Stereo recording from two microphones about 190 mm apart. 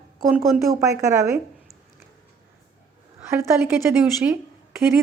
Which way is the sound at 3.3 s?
10° right (ahead or behind).